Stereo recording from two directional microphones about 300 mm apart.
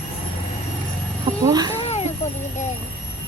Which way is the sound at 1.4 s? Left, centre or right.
Centre.